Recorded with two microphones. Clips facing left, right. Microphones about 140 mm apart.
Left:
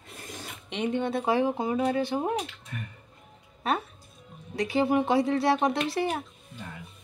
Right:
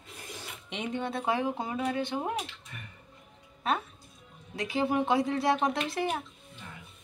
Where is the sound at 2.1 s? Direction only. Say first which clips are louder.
Left 4 dB; 35° left (ahead or behind).